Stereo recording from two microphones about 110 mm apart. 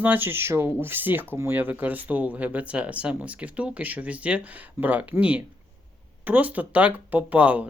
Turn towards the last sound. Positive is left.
turn(degrees=-10)  # may be behind; listen again after turning